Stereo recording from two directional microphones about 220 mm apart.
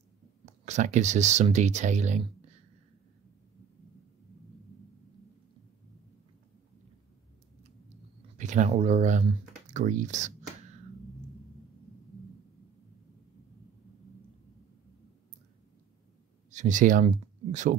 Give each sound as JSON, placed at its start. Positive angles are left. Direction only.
{"t": 0.5, "sound": "speech", "side_deg": -30}
{"t": 8.4, "sound": "speech", "side_deg": -35}
{"t": 16.4, "sound": "speech", "side_deg": -35}